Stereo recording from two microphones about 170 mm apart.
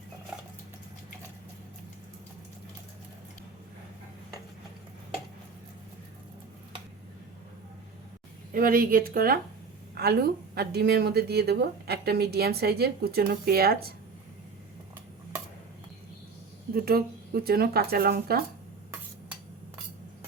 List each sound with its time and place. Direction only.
8.5 s speech: 55° right (ahead or behind)
16.7 s speech: 65° right (ahead or behind)